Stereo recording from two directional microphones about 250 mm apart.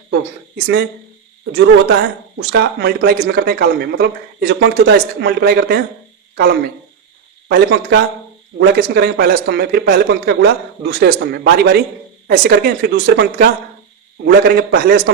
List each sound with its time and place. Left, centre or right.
0.1 s speech: right